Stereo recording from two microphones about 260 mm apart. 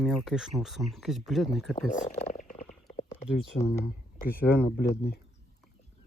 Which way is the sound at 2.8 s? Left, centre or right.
Left.